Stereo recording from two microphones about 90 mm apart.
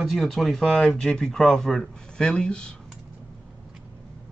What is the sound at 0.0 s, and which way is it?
Speech, centre (ahead or behind).